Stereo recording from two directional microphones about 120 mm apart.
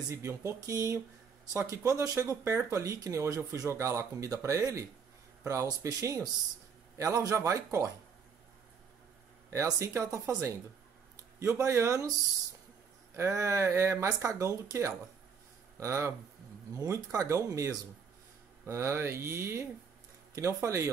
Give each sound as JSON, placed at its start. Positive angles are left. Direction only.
{"t": 0.1, "sound": "speech", "side_deg": -25}
{"t": 9.5, "sound": "speech", "side_deg": -25}
{"t": 13.1, "sound": "speech", "side_deg": -25}